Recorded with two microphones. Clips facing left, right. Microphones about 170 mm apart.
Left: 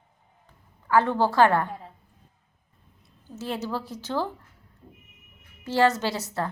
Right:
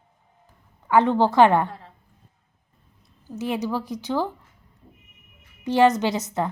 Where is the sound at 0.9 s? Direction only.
20° right (ahead or behind).